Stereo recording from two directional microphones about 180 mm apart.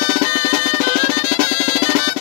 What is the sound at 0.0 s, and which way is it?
Music, 45° right (ahead or behind).